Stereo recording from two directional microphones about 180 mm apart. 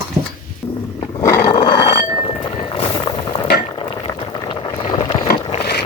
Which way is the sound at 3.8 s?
25° left (ahead or behind).